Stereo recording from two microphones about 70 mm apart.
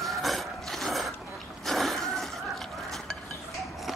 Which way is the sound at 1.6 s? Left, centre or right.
Centre.